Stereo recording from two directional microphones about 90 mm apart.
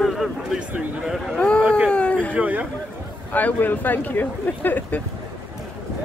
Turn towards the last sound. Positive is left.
turn(degrees=20)  # may be behind; listen again after turning